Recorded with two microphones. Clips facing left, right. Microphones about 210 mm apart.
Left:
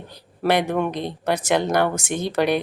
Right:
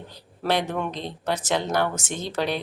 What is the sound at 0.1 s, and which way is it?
Speech, 15° left (ahead or behind).